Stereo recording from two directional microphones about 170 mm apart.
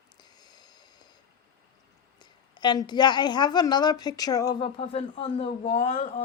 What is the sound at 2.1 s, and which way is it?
A woman's voice, 25° left (ahead or behind).